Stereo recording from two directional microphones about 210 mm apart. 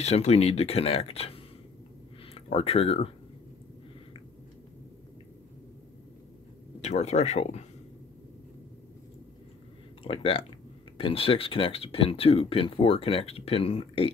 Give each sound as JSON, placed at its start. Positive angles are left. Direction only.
{"t": 0.0, "sound": "speech", "side_deg": 30}
{"t": 6.8, "sound": "speech", "side_deg": 30}
{"t": 10.0, "sound": "speech", "side_deg": 25}